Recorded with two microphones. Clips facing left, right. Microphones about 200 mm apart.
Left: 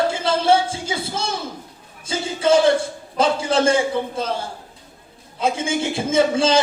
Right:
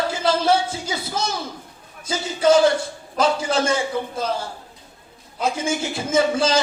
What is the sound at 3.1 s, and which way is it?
Speech, 30° left (ahead or behind).